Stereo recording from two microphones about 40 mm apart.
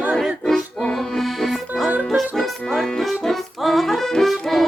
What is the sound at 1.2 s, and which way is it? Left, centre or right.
Accordion, centre.